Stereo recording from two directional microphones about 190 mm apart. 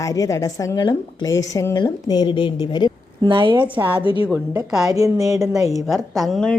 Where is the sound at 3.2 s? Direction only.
25° right (ahead or behind).